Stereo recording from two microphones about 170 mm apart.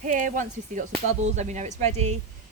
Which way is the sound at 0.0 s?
50° right (ahead or behind).